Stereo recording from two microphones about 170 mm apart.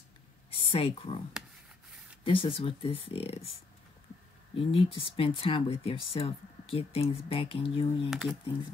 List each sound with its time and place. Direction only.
0.6 s speech: 30° left (ahead or behind)
2.2 s speech: 30° left (ahead or behind)
4.6 s speech: 30° left (ahead or behind)
8.1 s speech: centre (ahead or behind)